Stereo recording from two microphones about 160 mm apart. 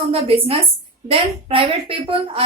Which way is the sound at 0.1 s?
40° right (ahead or behind).